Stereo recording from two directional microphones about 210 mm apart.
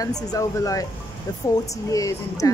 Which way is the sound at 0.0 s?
15° left (ahead or behind).